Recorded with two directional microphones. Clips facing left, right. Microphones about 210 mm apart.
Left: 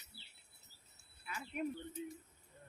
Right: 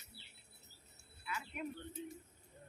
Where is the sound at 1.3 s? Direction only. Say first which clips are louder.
Left 3 dB; 40° left (ahead or behind).